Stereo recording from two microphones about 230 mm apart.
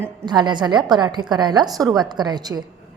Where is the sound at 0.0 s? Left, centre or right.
Centre.